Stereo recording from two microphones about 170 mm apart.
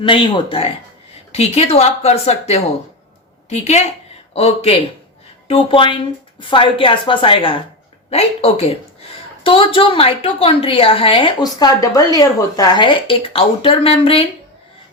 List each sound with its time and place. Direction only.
0.0 s a woman's voice: 30° left (ahead or behind)